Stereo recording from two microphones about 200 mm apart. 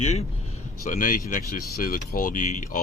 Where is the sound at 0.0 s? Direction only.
35° left (ahead or behind).